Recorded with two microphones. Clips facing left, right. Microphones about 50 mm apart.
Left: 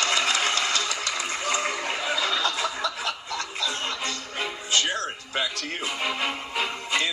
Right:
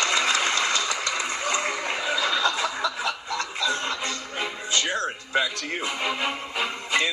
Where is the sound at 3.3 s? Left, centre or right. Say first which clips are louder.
Right 3 dB; right.